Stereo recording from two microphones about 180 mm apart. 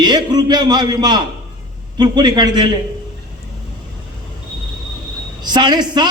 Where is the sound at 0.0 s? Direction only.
25° right (ahead or behind).